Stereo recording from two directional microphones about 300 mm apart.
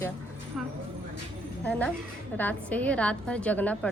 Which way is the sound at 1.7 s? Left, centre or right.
Centre.